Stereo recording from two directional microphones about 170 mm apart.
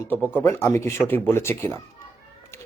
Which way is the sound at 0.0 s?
15° left (ahead or behind).